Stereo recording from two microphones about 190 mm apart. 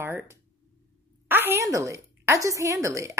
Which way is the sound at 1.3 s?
10° right (ahead or behind).